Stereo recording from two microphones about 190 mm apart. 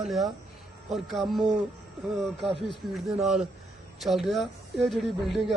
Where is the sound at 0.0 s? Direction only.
Centre (ahead or behind).